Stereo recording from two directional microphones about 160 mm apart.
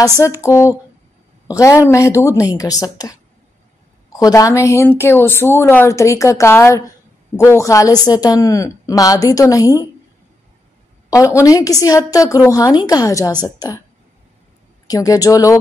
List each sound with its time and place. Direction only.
0.4 s a woman's voice: 15° left (ahead or behind)
11.1 s a woman's voice: 20° left (ahead or behind)
14.9 s a woman's voice: 20° left (ahead or behind)